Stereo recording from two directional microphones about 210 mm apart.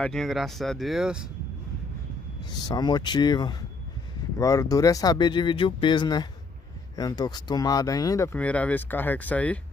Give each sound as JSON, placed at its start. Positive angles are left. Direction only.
{"t": 0.0, "sound": "speech", "side_deg": 0}
{"t": 2.6, "sound": "speech", "side_deg": 20}